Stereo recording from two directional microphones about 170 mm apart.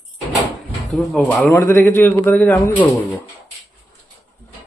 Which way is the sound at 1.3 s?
10° left (ahead or behind).